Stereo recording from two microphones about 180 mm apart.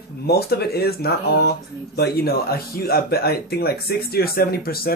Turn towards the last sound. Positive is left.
turn(degrees=55)  # may be behind; listen again after turning